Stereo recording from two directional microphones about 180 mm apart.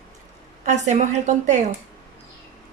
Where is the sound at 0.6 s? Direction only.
40° right (ahead or behind).